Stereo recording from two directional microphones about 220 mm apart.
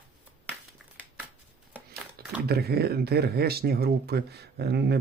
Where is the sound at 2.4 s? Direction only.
45° right (ahead or behind).